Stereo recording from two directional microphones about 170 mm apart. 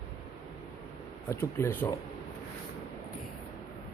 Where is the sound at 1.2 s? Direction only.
15° left (ahead or behind).